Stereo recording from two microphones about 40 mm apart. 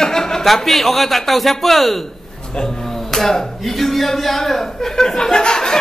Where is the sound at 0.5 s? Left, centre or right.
Centre.